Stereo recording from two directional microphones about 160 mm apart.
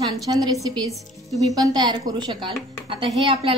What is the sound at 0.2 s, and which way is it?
A woman's voice, 20° right (ahead or behind).